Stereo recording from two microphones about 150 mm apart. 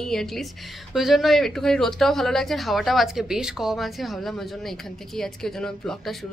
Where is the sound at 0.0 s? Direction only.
5° left (ahead or behind).